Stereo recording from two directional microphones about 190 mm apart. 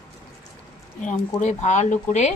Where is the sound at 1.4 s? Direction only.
40° left (ahead or behind).